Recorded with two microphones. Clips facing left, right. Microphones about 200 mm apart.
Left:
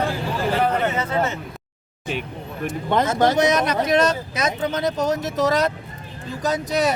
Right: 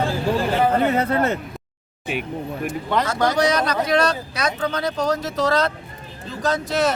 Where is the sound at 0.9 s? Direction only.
60° right (ahead or behind).